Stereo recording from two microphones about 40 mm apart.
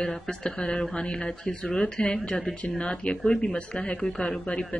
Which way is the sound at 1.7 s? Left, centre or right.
Centre.